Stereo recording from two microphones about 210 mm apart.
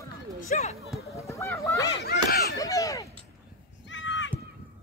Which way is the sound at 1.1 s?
15° left (ahead or behind).